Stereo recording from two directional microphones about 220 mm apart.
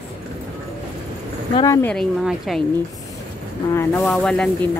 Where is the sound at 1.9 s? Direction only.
Centre (ahead or behind).